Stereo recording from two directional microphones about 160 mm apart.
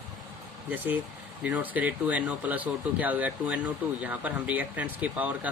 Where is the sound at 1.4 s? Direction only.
10° right (ahead or behind).